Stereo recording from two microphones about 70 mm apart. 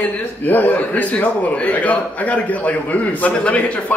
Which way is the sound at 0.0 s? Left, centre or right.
Left.